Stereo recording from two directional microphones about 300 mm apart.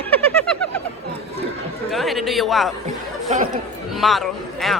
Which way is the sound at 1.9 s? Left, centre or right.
Centre.